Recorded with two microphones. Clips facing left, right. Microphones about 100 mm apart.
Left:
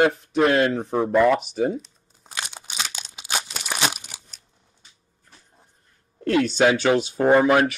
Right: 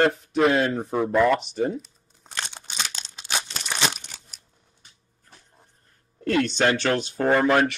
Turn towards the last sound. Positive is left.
turn(degrees=5)  # may be behind; listen again after turning